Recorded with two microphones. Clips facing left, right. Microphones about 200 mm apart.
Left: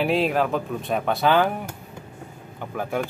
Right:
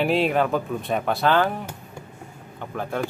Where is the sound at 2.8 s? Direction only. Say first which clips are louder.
Left 1 dB; 10° left (ahead or behind).